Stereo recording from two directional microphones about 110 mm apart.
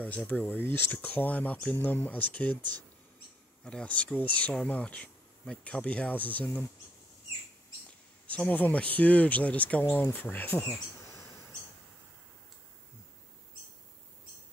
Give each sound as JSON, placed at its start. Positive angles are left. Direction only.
{"t": 0.0, "sound": "speech", "side_deg": 15}
{"t": 3.6, "sound": "speech", "side_deg": 10}
{"t": 8.3, "sound": "speech", "side_deg": 15}